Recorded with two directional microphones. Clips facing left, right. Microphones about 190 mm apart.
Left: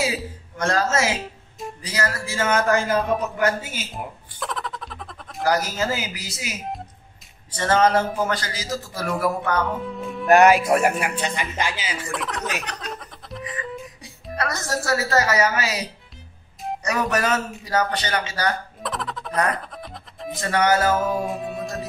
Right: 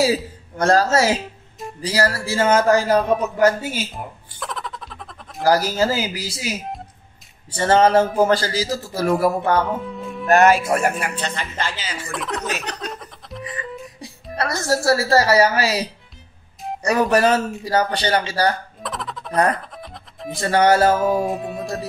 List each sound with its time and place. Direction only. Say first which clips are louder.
0.0 s a man's voice: right 7 dB; 35° right (ahead or behind)
3.9 s music: even; centre (ahead or behind)
5.4 s a man's voice: right 5 dB; 30° right (ahead or behind)
9.8 s speech: even; centre (ahead or behind)
10.2 s speech: even; 15° left (ahead or behind)
12.1 s music: right 3 dB; centre (ahead or behind)
14.3 s a man's voice: right 5 dB; 30° right (ahead or behind)
16.8 s a man's voice: right 7 dB; 30° right (ahead or behind)
18.8 s music: even; centre (ahead or behind)
20.3 s a man's voice: right 4 dB; 30° right (ahead or behind)
21.1 s music: right 4 dB; centre (ahead or behind)